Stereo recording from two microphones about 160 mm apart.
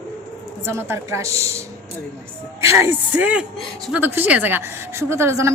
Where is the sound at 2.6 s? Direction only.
20° right (ahead or behind).